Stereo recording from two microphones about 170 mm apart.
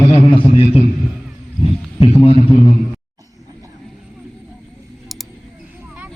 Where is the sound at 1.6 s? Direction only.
35° left (ahead or behind).